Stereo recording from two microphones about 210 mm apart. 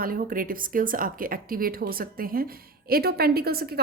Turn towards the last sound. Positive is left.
turn(degrees=-45)  # may be behind; listen again after turning